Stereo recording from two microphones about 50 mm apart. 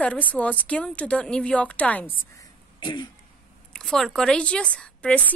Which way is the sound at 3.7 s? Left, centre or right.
Centre.